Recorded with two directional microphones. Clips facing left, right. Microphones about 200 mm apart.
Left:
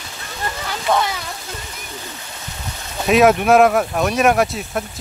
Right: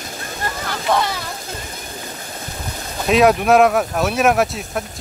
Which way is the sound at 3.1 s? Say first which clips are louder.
Left 1 dB; centre (ahead or behind).